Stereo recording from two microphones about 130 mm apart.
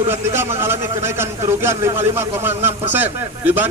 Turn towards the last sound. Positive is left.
turn(degrees=-15)  # may be behind; listen again after turning